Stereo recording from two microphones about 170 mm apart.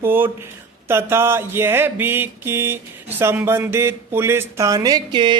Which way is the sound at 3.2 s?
15° right (ahead or behind).